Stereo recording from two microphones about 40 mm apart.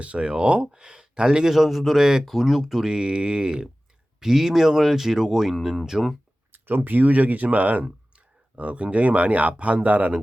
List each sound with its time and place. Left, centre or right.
0.0 s speech: right
0.7 s speech: centre
1.5 s speech: centre
2.9 s speech: right
6.5 s speech: right